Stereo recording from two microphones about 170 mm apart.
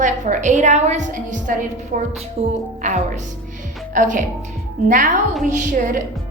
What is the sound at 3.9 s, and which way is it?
A woman's voice, 50° right (ahead or behind).